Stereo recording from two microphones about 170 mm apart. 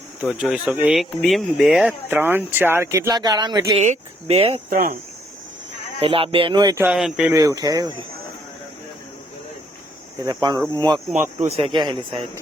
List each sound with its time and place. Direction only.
0.2 s speech: 5° right (ahead or behind); by 3.6 s 25° right (ahead or behind)
3.8 s speech: 40° right (ahead or behind)
6.0 s speech: 30° right (ahead or behind)
6.8 s speech: 5° right (ahead or behind)
7.3 s speech: 20° right (ahead or behind)
10.2 s speech: 25° right (ahead or behind)
11.3 s speech: 40° right (ahead or behind)